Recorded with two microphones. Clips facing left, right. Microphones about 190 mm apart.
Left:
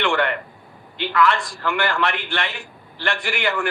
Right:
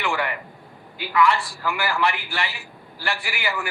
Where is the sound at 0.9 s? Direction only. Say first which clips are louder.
Left 1 dB; 5° right (ahead or behind).